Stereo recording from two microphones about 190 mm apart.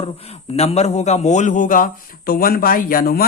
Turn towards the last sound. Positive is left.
turn(degrees=50)  # may be behind; listen again after turning